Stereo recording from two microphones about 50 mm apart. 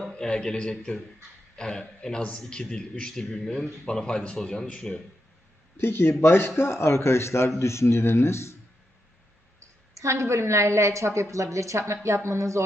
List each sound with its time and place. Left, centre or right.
0.1 s a man's voice: centre
5.7 s speech: left
9.9 s a woman's voice: right